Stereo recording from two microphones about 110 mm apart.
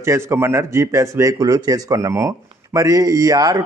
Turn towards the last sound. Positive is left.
turn(degrees=-35)  # may be behind; listen again after turning